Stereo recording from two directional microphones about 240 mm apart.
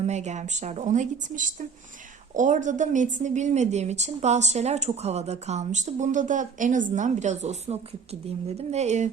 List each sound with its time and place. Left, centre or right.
0.0 s a woman's voice: right